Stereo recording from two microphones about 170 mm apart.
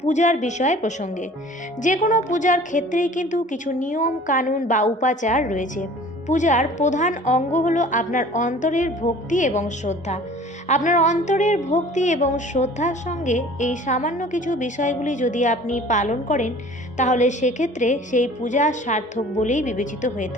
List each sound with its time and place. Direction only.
0.0 s speech: 45° left (ahead or behind)